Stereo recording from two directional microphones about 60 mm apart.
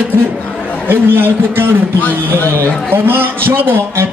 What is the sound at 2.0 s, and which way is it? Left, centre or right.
Speech, left.